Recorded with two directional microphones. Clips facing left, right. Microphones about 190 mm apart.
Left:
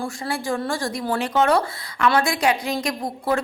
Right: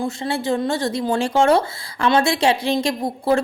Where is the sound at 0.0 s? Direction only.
25° right (ahead or behind).